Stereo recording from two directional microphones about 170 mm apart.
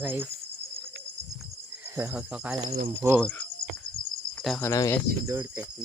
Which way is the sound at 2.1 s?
5° right (ahead or behind).